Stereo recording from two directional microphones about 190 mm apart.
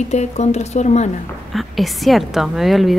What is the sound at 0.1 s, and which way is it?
Speech, 35° left (ahead or behind).